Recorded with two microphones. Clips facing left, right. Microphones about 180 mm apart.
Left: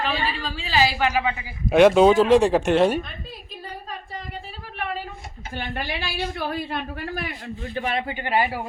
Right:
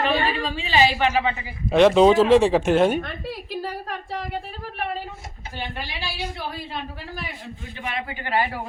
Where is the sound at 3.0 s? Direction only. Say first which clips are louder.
Right 7 dB; 80° right.